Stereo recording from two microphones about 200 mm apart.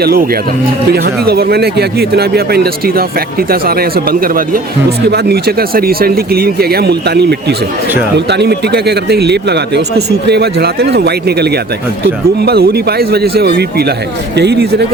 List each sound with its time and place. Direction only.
0.0 s a man's voice: 50° right (ahead or behind)